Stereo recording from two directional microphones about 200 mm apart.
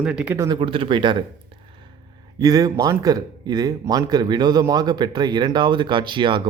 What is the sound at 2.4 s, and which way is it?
Speech, 20° right (ahead or behind).